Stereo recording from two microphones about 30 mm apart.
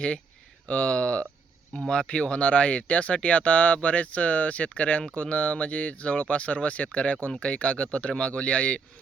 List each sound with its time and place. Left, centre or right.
0.7 s speech: left